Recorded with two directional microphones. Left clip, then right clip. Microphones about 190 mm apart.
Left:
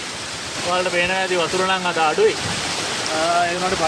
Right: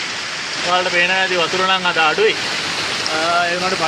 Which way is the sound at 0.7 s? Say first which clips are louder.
Right 4 dB; 20° right (ahead or behind).